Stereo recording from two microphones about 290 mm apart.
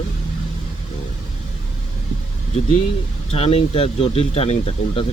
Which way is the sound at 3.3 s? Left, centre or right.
Centre.